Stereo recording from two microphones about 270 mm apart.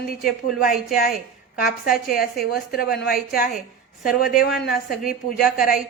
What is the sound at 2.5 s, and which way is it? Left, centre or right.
Speech, left.